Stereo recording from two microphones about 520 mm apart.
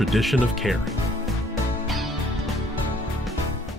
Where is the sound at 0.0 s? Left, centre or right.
Centre.